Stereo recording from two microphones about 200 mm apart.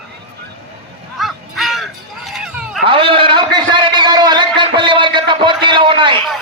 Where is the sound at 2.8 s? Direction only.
25° right (ahead or behind).